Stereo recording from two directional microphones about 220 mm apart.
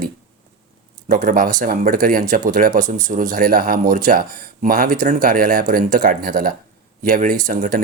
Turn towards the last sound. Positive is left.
turn(degrees=-40)  # may be behind; listen again after turning